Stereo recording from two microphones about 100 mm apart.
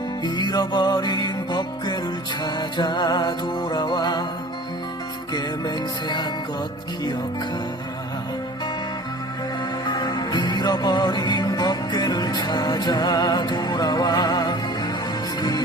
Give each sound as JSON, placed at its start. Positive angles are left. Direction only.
{"t": 0.3, "sound": "music", "side_deg": 45}
{"t": 5.3, "sound": "music", "side_deg": 45}
{"t": 9.8, "sound": "music", "side_deg": 45}